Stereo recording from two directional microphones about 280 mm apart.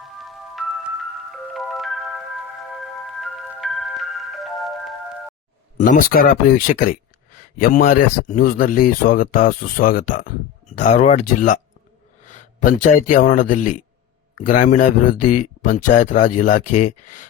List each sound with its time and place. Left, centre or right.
0.0 s music: centre
5.7 s speech: left